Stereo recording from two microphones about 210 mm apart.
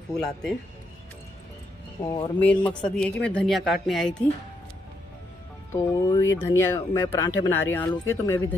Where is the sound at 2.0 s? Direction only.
20° left (ahead or behind).